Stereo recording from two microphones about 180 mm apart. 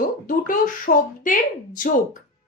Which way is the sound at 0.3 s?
50° left (ahead or behind).